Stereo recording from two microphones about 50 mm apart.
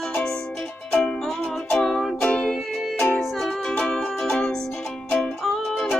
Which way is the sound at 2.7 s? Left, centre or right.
Centre.